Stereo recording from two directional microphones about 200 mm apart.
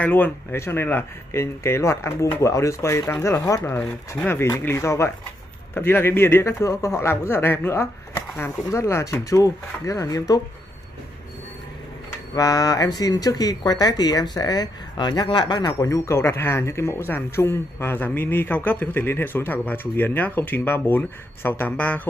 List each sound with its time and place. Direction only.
0.0 s speech: 10° left (ahead or behind)
12.4 s speech: 15° left (ahead or behind)